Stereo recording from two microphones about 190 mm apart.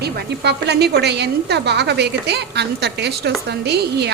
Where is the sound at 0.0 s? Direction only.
60° right (ahead or behind).